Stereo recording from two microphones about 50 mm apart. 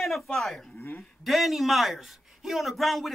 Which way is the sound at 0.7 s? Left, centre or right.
Left.